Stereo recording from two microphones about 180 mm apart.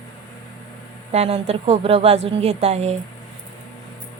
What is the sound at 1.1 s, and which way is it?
A woman's voice, 35° right (ahead or behind).